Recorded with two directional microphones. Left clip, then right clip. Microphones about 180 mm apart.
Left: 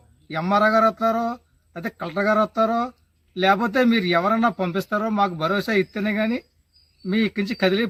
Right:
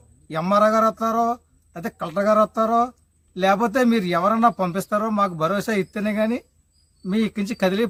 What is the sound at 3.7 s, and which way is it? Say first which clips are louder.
Speech: left 1 dB; 35° right (ahead or behind).